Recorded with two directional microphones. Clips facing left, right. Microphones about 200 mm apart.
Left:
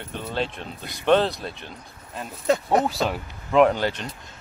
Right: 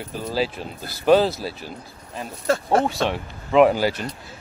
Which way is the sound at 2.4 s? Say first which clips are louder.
Even; 20° left (ahead or behind).